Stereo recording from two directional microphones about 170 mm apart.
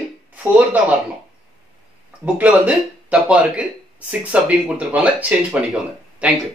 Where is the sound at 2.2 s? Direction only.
10° right (ahead or behind).